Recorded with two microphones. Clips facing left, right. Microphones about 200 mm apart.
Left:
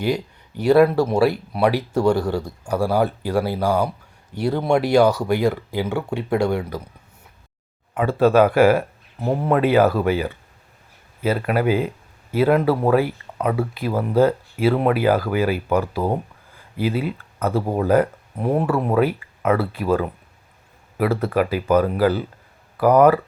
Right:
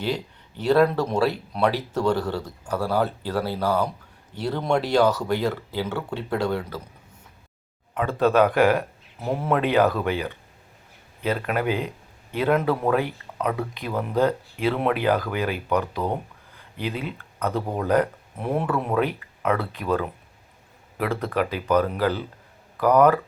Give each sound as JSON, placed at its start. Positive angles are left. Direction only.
{"t": 0.0, "sound": "speech", "side_deg": 10}
{"t": 7.9, "sound": "speech", "side_deg": 10}